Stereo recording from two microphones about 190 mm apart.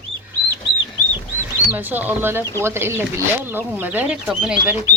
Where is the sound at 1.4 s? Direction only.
10° right (ahead or behind).